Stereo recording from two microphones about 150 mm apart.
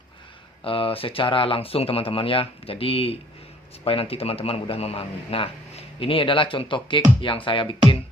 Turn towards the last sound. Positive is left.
turn(degrees=35)  # may be behind; listen again after turning